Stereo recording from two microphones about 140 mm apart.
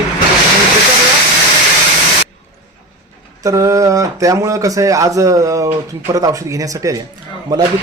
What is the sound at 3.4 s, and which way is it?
Speech, 20° right (ahead or behind).